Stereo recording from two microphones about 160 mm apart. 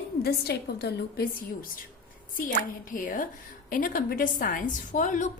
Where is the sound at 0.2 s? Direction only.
85° left.